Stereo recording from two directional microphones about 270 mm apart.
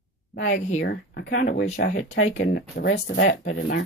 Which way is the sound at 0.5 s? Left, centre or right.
Left.